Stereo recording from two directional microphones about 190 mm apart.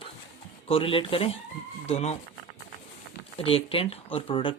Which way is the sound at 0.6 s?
30° left (ahead or behind).